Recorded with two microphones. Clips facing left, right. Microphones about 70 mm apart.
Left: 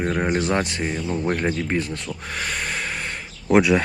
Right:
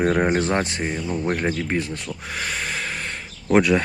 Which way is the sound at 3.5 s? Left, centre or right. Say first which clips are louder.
Left 1 dB; centre.